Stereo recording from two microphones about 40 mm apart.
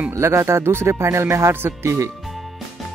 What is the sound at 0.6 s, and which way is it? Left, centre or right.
Speech, right.